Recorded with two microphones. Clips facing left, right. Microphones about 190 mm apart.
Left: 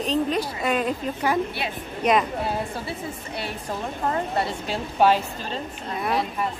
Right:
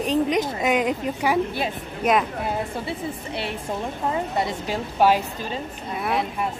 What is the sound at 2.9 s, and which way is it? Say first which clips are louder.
Speech: right 3 dB; 25° right (ahead or behind).